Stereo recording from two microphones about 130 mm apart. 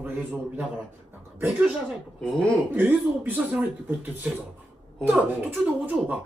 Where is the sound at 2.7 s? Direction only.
15° right (ahead or behind).